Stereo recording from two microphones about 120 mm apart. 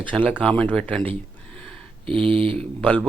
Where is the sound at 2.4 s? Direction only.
10° left (ahead or behind).